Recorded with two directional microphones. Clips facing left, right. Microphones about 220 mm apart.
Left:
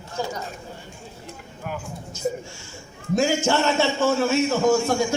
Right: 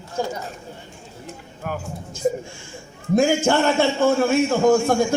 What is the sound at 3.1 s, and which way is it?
A man's voice, 55° right (ahead or behind).